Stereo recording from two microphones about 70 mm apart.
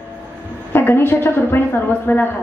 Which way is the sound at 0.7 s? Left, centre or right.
Left.